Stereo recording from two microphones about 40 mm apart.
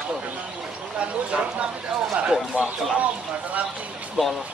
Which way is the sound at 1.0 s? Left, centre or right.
Right.